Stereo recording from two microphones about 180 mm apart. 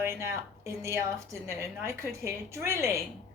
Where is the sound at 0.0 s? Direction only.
15° right (ahead or behind).